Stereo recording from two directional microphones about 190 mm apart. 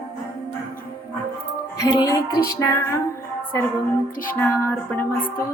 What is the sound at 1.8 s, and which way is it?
Speech, 20° left (ahead or behind).